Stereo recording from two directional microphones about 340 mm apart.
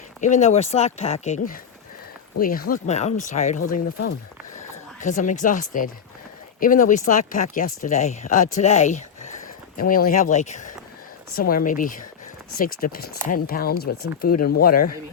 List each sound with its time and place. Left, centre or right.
0.2 s speech: left
4.9 s speech: left